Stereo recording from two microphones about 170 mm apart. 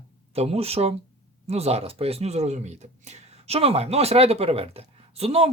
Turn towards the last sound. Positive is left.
turn(degrees=-35)  # may be behind; listen again after turning